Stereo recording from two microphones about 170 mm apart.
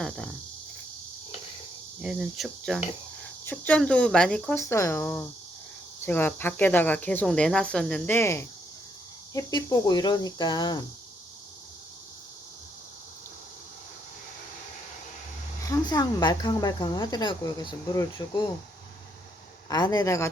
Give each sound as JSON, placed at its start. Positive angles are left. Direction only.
{"t": 0.0, "sound": "speech", "side_deg": 5}
{"t": 2.0, "sound": "speech", "side_deg": -5}
{"t": 15.6, "sound": "speech", "side_deg": 20}
{"t": 19.7, "sound": "speech", "side_deg": 20}